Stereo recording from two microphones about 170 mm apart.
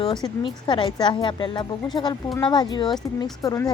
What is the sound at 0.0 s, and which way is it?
A woman's voice, 30° left (ahead or behind).